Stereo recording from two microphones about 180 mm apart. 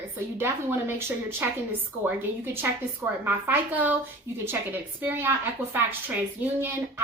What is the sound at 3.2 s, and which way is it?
A woman's voice, 10° right (ahead or behind).